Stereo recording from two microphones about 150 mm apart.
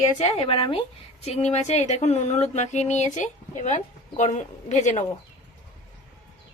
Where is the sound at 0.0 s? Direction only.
50° left (ahead or behind).